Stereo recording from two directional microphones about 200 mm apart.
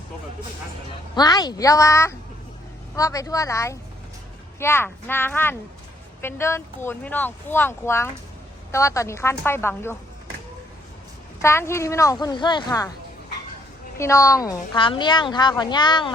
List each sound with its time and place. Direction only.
1.1 s speech: 20° left (ahead or behind)
11.4 s a woman's voice: 15° left (ahead or behind)
14.0 s a woman's voice: 15° left (ahead or behind)